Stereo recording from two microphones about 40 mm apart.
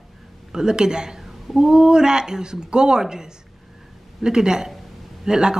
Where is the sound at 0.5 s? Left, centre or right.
Centre.